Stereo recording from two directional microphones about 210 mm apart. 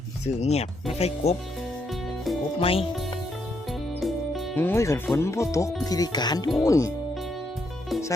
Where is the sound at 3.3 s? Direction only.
Centre (ahead or behind).